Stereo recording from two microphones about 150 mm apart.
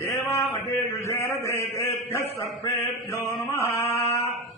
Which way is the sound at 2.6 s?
20° left (ahead or behind).